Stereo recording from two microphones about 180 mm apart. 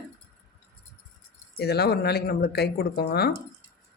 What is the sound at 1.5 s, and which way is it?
Speech, 65° left (ahead or behind).